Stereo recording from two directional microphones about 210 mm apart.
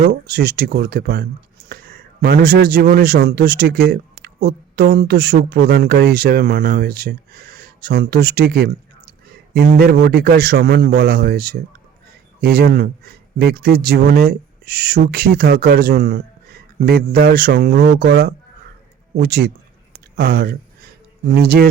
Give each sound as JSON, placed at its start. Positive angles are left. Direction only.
{"t": 0.0, "sound": "a man's voice", "side_deg": -45}
{"t": 2.2, "sound": "a man's voice", "side_deg": -50}